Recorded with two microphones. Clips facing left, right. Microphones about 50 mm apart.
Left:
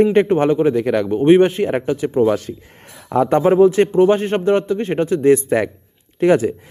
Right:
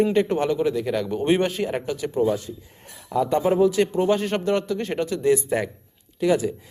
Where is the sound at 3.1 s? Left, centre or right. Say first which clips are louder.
Left 6 dB; left.